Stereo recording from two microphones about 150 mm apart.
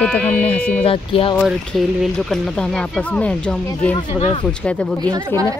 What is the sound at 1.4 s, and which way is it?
Speech, centre (ahead or behind).